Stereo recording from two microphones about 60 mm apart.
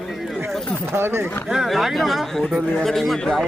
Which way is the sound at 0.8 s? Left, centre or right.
Right.